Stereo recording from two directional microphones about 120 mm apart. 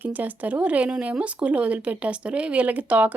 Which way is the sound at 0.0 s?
15° right (ahead or behind).